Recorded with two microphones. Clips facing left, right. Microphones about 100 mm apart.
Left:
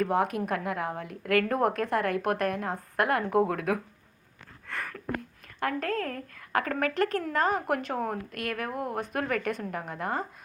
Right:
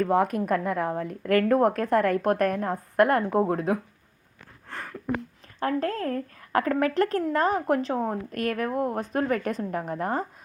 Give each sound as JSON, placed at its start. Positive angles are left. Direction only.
{"t": 0.0, "sound": "a woman's voice", "side_deg": -45}
{"t": 3.2, "sound": "speech", "side_deg": -30}
{"t": 4.7, "sound": "a sound", "side_deg": -30}
{"t": 4.9, "sound": "speech", "side_deg": -15}
{"t": 5.5, "sound": "a woman's voice", "side_deg": -30}
{"t": 8.3, "sound": "a woman's voice", "side_deg": -40}